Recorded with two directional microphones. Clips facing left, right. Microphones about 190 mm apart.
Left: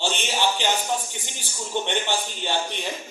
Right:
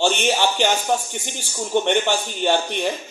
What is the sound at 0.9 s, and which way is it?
A man's voice, 60° right (ahead or behind).